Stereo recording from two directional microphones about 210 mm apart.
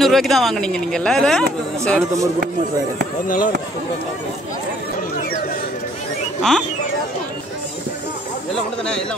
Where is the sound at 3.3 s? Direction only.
40° left (ahead or behind).